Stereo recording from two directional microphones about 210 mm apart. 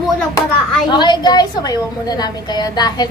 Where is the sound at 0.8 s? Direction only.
20° left (ahead or behind).